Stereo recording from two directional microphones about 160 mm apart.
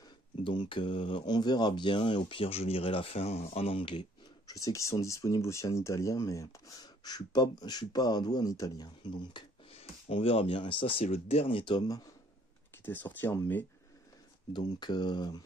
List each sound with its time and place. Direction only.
0.4 s speech: 30° left (ahead or behind)
12.8 s speech: 10° left (ahead or behind)
14.5 s speech: 30° left (ahead or behind)